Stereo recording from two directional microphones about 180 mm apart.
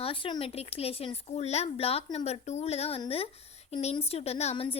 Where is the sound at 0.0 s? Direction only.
30° left (ahead or behind).